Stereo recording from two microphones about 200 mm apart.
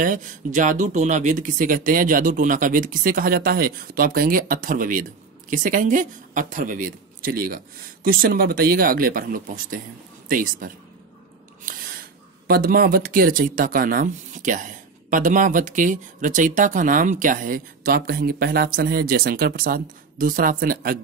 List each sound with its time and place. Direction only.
0.0 s a woman's voice: 40° right (ahead or behind)
12.4 s speech: 50° right (ahead or behind)